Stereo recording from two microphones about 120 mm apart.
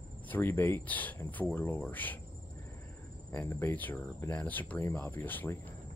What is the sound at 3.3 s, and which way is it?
Speech, 15° left (ahead or behind).